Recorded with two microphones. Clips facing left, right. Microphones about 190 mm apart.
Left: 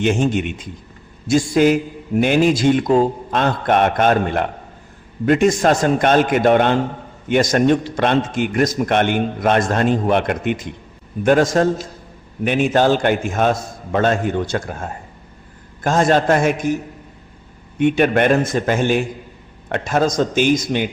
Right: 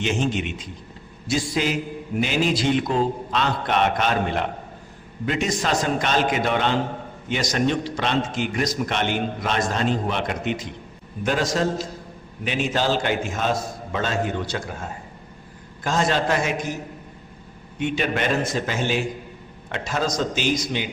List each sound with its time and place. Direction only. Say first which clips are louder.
0.0 s a man's voice: left 6 dB; 50° left (ahead or behind)
17.7 s a man's voice: left 9 dB; 55° left (ahead or behind)